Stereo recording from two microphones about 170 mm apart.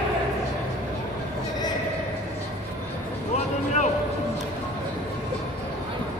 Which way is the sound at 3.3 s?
40° left (ahead or behind).